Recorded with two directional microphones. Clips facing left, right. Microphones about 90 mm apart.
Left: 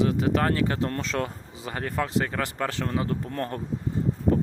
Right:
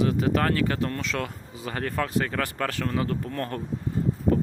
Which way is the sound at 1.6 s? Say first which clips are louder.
Right 1 dB; 20° left (ahead or behind).